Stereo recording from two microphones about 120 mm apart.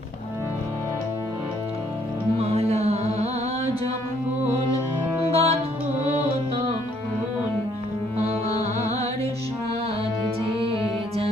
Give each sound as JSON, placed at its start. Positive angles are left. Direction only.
{"t": 2.4, "sound": "music", "side_deg": -60}
{"t": 5.3, "sound": "music", "side_deg": -55}
{"t": 8.2, "sound": "music", "side_deg": -60}